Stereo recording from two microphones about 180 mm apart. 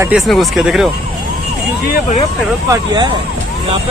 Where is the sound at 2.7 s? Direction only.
25° right (ahead or behind).